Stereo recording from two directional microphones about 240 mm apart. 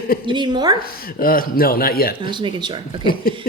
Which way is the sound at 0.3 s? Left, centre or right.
Centre.